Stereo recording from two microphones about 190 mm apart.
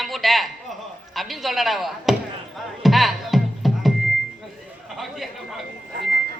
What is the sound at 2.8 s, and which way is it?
Music, centre (ahead or behind).